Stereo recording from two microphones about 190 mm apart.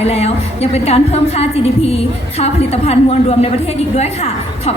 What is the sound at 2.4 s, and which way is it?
A woman's voice, 35° left (ahead or behind).